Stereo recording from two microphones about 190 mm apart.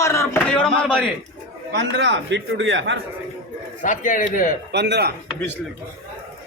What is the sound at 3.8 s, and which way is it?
Speech, 45° left (ahead or behind).